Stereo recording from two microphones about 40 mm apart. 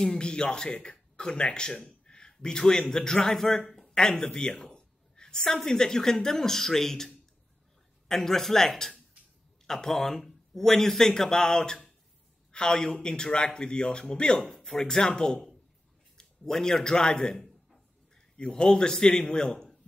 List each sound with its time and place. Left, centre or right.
0.0 s a woman's voice: centre
8.1 s speech: centre
14.4 s a man's voice: centre